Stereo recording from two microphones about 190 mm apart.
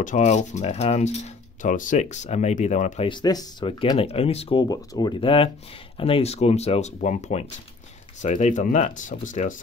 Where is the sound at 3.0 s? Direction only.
20° left (ahead or behind).